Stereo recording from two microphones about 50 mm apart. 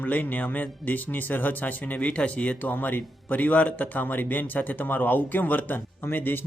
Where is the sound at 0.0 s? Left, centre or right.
Left.